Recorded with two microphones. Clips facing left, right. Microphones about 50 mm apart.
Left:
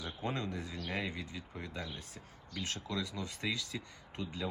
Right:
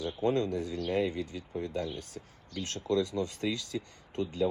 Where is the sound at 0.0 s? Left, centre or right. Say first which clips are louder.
Right 9 dB; left.